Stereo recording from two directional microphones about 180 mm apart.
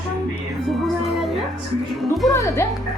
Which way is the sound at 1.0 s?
Centre (ahead or behind).